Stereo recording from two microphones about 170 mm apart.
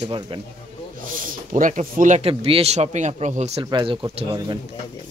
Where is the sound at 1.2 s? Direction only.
50° right (ahead or behind).